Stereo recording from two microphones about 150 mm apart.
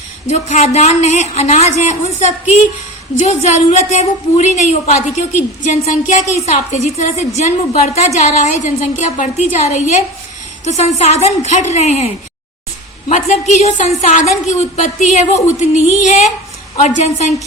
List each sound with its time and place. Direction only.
0.3 s a woman's voice: 50° left (ahead or behind)